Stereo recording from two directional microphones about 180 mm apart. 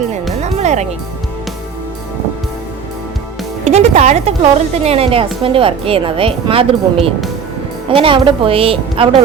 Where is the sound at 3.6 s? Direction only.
40° right (ahead or behind).